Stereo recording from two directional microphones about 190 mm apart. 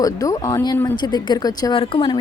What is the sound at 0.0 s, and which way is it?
Speech, 20° left (ahead or behind).